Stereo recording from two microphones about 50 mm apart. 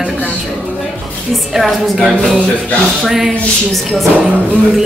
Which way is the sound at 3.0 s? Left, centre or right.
Centre.